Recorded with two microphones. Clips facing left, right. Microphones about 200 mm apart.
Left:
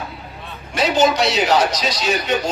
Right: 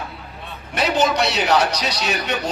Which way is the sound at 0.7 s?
60° right (ahead or behind).